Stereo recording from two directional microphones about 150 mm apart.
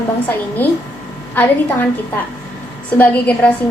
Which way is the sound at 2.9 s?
10° left (ahead or behind).